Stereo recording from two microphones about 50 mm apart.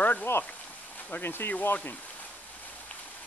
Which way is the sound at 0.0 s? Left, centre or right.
Left.